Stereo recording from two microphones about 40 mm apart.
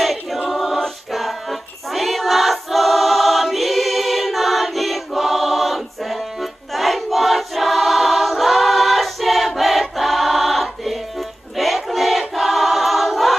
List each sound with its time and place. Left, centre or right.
0.0 s choir: centre